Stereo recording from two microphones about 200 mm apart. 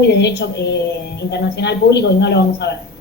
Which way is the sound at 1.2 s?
60° left (ahead or behind).